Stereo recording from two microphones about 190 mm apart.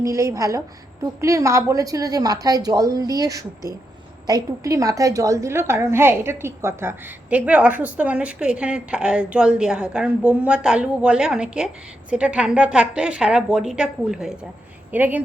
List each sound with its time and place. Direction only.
0.0 s a woman's voice: 15° right (ahead or behind)